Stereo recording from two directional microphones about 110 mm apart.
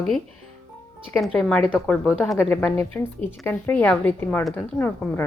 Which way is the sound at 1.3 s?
5° left (ahead or behind).